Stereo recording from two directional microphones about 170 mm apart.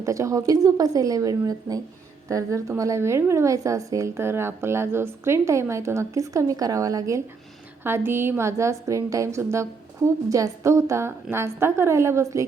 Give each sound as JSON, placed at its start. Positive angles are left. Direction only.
{"t": 0.0, "sound": "a woman's voice", "side_deg": -20}